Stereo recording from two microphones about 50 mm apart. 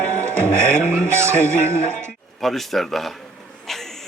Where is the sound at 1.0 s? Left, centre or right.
Right.